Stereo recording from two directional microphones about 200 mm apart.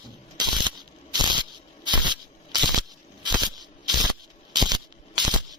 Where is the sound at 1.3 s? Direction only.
20° right (ahead or behind).